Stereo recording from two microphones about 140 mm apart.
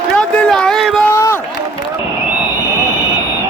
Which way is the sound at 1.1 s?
20° left (ahead or behind).